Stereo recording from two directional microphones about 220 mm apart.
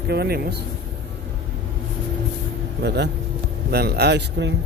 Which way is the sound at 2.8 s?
50° right (ahead or behind).